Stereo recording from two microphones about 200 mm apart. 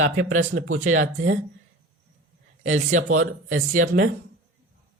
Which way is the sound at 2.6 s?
40° right (ahead or behind).